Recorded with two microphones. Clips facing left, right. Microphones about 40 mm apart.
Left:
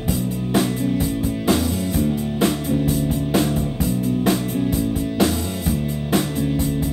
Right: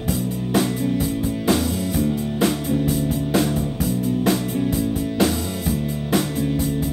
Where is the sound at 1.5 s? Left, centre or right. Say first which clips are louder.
Left 1 dB; centre.